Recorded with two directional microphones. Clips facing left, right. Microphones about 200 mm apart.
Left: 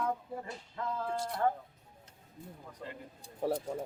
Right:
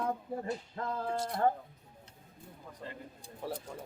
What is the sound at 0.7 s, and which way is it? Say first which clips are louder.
Speech: left 3 dB; 45° right (ahead or behind).